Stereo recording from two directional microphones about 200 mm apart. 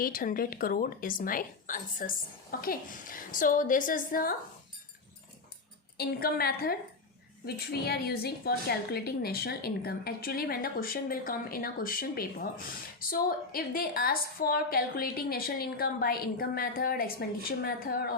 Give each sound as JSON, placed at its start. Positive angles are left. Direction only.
{"t": 0.0, "sound": "a woman's voice", "side_deg": 45}
{"t": 6.0, "sound": "a woman's voice", "side_deg": 50}